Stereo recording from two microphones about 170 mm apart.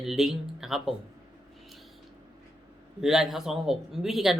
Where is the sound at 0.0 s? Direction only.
Centre (ahead or behind).